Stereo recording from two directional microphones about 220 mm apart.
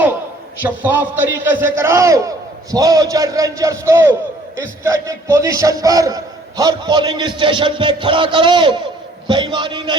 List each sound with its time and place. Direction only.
0.6 s a man's voice: 10° right (ahead or behind)